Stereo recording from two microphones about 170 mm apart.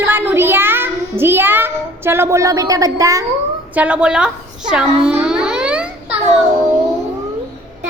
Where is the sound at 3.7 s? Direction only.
10° right (ahead or behind).